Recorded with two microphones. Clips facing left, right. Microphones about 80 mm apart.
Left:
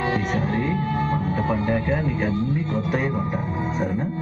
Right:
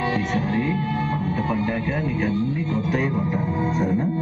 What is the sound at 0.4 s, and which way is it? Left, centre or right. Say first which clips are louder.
Music: even; left.